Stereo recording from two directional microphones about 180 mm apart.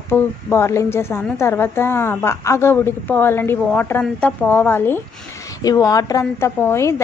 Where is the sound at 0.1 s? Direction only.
15° left (ahead or behind).